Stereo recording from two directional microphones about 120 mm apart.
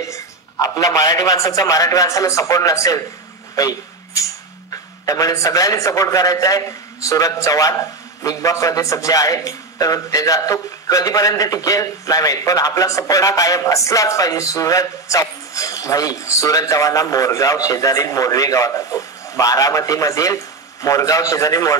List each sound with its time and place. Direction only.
0.0 s a man's voice: 25° left (ahead or behind)